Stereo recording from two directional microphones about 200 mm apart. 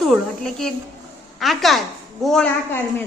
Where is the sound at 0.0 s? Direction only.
Centre (ahead or behind).